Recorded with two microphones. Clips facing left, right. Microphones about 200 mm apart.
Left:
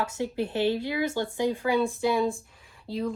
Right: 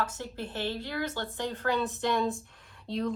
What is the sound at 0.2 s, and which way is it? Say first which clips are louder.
Speech: left 9 dB; 15° left (ahead or behind).